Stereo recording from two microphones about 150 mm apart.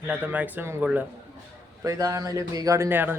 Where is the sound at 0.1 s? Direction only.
10° right (ahead or behind).